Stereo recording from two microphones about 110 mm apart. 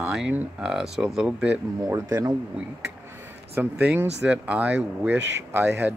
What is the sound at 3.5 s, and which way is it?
Speech, 20° right (ahead or behind).